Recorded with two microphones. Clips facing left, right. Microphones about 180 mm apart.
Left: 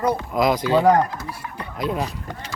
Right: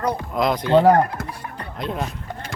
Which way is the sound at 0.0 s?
5° left (ahead or behind).